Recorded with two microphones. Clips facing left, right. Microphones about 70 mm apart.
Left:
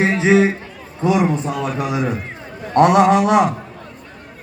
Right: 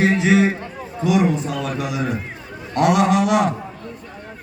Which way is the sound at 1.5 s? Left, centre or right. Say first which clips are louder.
Left 3 dB; left.